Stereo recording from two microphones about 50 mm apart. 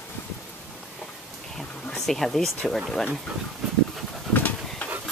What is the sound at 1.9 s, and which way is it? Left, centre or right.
Speech, centre.